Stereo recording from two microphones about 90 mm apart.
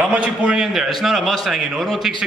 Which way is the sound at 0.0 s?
15° right (ahead or behind).